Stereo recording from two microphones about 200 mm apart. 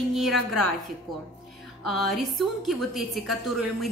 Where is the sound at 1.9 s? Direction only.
Centre (ahead or behind).